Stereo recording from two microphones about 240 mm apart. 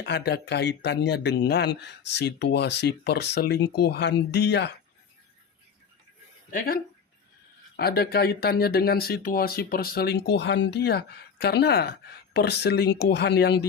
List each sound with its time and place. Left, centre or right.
0.0 s speech: left
6.5 s speech: left
7.8 s speech: left